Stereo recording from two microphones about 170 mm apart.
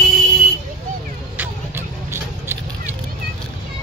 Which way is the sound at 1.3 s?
15° right (ahead or behind).